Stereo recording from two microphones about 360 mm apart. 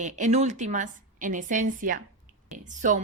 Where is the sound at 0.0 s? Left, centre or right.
Centre.